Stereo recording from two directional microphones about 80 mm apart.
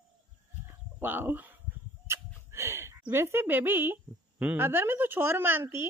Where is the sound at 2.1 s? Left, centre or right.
Right.